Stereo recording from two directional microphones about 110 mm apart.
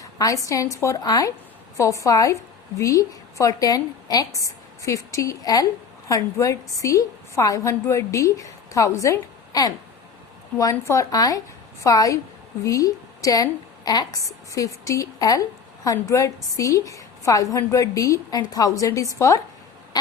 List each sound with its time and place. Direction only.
0.0 s a woman's voice: 30° left (ahead or behind)